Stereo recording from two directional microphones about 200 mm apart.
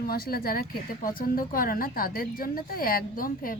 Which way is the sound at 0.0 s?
50° left (ahead or behind).